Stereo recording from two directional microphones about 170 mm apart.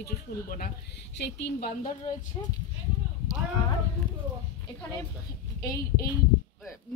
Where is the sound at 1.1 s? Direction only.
80° left.